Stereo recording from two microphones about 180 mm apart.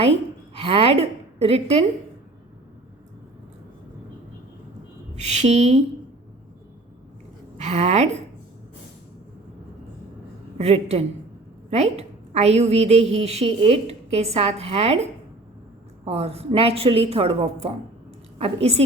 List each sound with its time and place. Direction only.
0.5 s a woman's voice: 35° right (ahead or behind)
5.1 s a woman's voice: 40° right (ahead or behind)
7.6 s a woman's voice: 35° right (ahead or behind)
10.6 s a woman's voice: 35° right (ahead or behind)
16.0 s a woman's voice: 35° right (ahead or behind)